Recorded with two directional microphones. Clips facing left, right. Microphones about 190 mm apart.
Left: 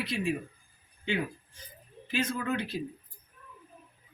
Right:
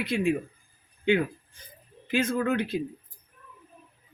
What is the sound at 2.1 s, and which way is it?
Speech, 50° right (ahead or behind).